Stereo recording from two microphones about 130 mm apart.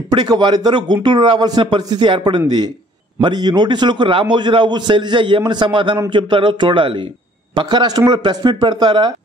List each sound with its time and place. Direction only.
0.1 s a man's voice: 35° right (ahead or behind)